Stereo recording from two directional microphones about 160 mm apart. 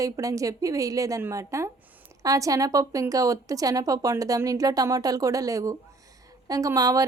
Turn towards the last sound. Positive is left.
turn(degrees=-20)  # may be behind; listen again after turning